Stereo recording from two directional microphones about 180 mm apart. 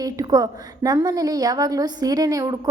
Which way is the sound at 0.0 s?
20° right (ahead or behind).